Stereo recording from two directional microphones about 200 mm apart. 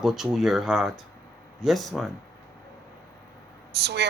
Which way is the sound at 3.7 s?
55° right (ahead or behind).